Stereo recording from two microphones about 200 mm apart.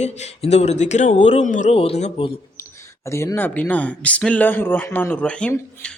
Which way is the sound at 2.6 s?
15° left (ahead or behind).